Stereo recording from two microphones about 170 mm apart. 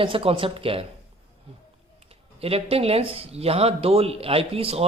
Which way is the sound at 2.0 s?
35° right (ahead or behind).